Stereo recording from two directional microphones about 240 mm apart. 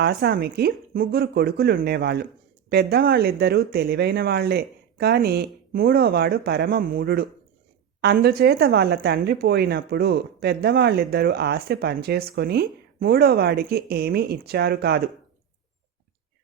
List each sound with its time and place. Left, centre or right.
0.0 s a woman's voice: right